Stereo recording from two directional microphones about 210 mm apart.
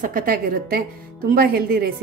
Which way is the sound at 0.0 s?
40° right (ahead or behind).